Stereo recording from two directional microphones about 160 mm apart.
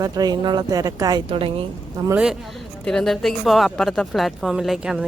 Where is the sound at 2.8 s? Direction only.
5° left (ahead or behind).